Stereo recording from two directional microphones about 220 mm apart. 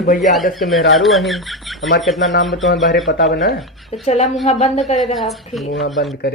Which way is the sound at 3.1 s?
55° left (ahead or behind).